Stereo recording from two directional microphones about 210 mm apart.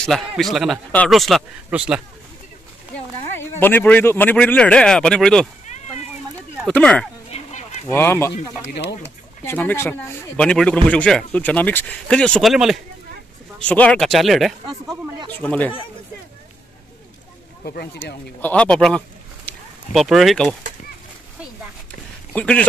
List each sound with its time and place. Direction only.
0.0 s speech: centre (ahead or behind)
3.3 s speech: 10° left (ahead or behind)
6.6 s speech: 5° left (ahead or behind)
7.2 s a sound: 30° left (ahead or behind)
7.9 s speech: 10° left (ahead or behind)
9.4 s speech: 10° left (ahead or behind)
18.0 s speech: 10° left (ahead or behind)
22.3 s speech: 5° left (ahead or behind)